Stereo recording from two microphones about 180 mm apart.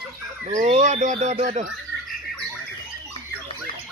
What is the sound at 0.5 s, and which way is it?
Speech, 35° right (ahead or behind).